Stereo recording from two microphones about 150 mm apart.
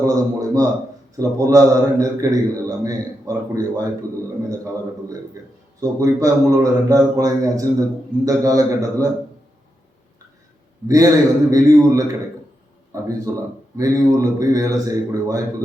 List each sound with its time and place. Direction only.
0.0 s a sound: 25° right (ahead or behind)
1.1 s a man's voice: 25° right (ahead or behind)
5.8 s a man's voice: 25° right (ahead or behind)
10.8 s a man's voice: 25° right (ahead or behind)
13.3 s a man's voice: 20° right (ahead or behind)